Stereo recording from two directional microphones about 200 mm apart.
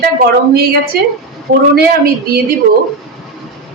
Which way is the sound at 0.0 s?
50° right (ahead or behind).